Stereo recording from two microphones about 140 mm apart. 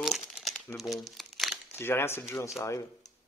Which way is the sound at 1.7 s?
15° left (ahead or behind).